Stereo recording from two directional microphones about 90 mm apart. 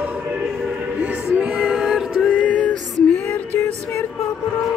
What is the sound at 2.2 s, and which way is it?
Music, 15° left (ahead or behind).